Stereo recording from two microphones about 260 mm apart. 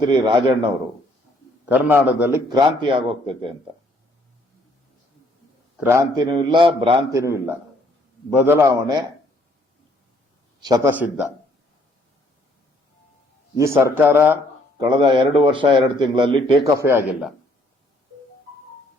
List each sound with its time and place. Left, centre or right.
0.1 s speech: centre
5.7 s speech: centre
10.6 s speech: centre
13.6 s speech: centre